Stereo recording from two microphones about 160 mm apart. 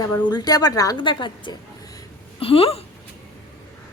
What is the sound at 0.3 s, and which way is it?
A woman's voice, 25° left (ahead or behind).